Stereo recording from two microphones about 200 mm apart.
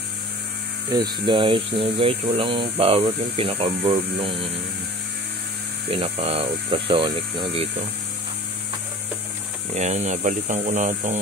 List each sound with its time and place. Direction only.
0.9 s speech: 20° right (ahead or behind)
5.9 s speech: 30° right (ahead or behind)
9.8 s speech: 35° right (ahead or behind)